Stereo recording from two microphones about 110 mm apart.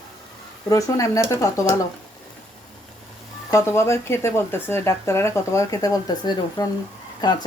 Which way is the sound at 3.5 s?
25° left (ahead or behind).